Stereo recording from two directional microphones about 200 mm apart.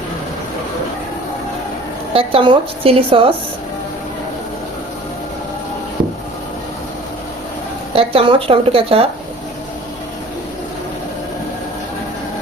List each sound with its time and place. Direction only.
2.1 s a woman's voice: 25° right (ahead or behind)
7.9 s a woman's voice: 25° right (ahead or behind)